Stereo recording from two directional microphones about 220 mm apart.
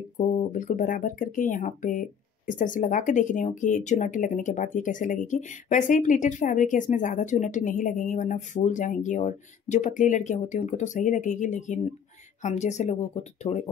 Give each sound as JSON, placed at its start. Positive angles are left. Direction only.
{"t": 0.2, "sound": "speech", "side_deg": 35}